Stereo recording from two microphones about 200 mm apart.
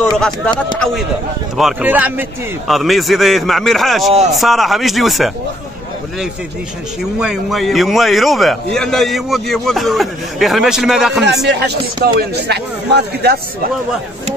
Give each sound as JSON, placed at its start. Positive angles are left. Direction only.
{"t": 1.6, "sound": "a man's voice", "side_deg": -5}
{"t": 4.1, "sound": "speech", "side_deg": -35}
{"t": 4.4, "sound": "a man's voice", "side_deg": 0}
{"t": 7.2, "sound": "a man's voice", "side_deg": -5}
{"t": 11.4, "sound": "speech", "side_deg": -55}